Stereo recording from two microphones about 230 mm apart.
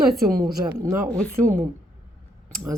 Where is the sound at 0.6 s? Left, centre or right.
Centre.